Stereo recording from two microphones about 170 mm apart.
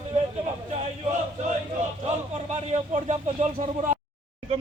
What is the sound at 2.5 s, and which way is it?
Speech, 45° right (ahead or behind).